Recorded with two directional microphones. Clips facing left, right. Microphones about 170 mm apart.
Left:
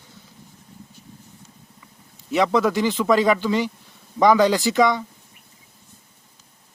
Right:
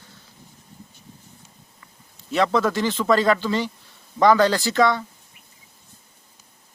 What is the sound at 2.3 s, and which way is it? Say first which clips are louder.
A man's voice: left 1 dB; 15° left (ahead or behind).